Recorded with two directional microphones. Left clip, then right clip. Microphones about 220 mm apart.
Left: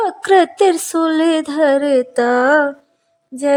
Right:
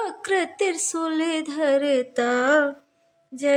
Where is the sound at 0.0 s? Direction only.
30° left (ahead or behind).